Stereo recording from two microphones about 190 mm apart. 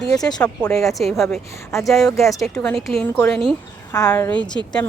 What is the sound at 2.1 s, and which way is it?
Speech, 15° left (ahead or behind).